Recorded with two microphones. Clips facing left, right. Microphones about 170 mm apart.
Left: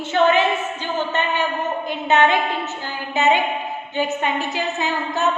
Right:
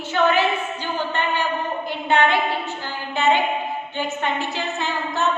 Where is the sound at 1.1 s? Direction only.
20° left (ahead or behind).